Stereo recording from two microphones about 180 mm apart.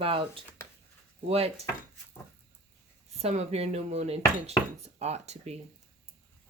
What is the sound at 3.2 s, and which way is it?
Speech, 35° right (ahead or behind).